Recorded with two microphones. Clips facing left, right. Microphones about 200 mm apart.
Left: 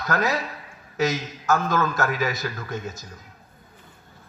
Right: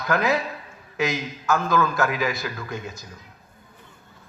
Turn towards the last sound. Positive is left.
turn(degrees=40)  # may be behind; listen again after turning